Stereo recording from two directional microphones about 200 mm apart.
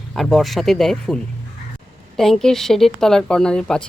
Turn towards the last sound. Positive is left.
turn(degrees=5)  # may be behind; listen again after turning